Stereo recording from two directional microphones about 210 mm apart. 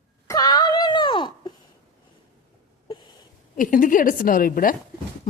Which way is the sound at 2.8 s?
20° left (ahead or behind).